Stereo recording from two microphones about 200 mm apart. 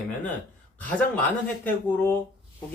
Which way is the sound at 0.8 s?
10° left (ahead or behind).